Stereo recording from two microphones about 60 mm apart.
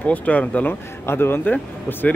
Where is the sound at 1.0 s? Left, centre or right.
Left.